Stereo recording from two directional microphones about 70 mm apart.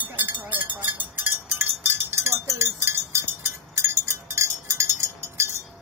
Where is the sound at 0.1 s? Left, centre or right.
Right.